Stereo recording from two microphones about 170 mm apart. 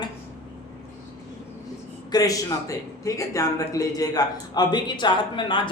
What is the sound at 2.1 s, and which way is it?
A man's voice, 20° left (ahead or behind).